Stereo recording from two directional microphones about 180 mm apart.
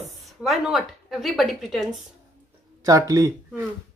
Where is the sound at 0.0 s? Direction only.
Centre (ahead or behind).